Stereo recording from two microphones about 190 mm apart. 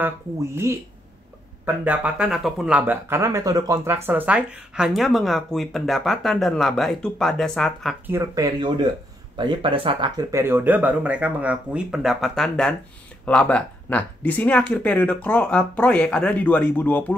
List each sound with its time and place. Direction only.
0.0 s speech: 15° right (ahead or behind)
1.9 s speech: 5° right (ahead or behind)
8.1 s speech: 15° right (ahead or behind); by 17.0 s 10° left (ahead or behind)